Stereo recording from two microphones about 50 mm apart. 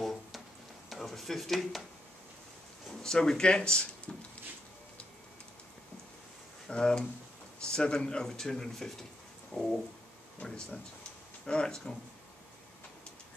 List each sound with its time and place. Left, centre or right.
0.0 s music: centre
0.8 s a sound: centre
3.0 s speech: centre
6.7 s speech: centre
9.5 s speech: centre